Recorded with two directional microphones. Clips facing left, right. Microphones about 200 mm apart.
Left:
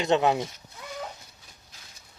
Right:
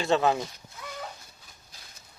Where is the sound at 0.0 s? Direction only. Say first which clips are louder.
Left 1 dB; 20° left (ahead or behind).